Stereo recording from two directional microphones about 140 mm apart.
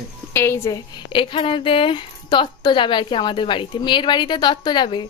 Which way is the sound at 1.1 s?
35° left (ahead or behind).